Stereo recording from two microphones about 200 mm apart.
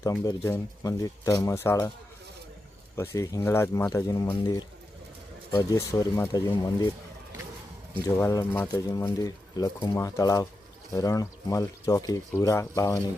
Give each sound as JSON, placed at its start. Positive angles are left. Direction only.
{"t": 0.0, "sound": "speech", "side_deg": 15}
{"t": 2.9, "sound": "speech", "side_deg": 15}
{"t": 8.0, "sound": "speech", "side_deg": 15}